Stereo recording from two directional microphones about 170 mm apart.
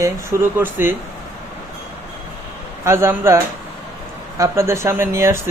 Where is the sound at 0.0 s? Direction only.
15° right (ahead or behind).